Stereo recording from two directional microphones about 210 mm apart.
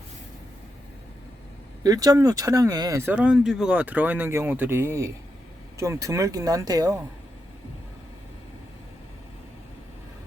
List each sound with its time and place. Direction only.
1.8 s speech: 15° right (ahead or behind)